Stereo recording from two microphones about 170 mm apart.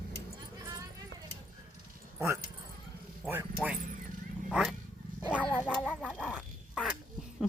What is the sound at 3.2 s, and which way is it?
Speech, 10° right (ahead or behind).